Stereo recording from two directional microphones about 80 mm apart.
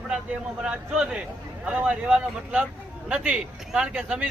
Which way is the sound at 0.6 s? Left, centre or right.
Centre.